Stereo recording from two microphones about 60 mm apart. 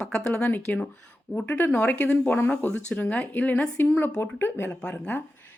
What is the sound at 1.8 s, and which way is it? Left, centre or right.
Speech, left.